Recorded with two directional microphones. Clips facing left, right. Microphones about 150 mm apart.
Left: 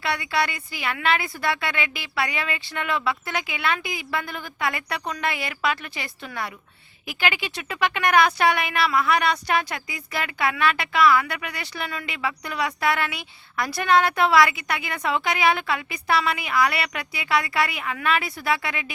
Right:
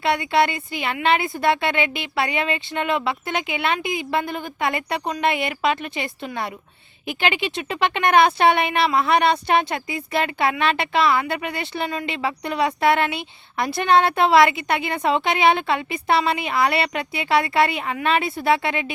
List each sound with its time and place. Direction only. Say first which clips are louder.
0.0 s speech: right 6 dB; 25° right (ahead or behind)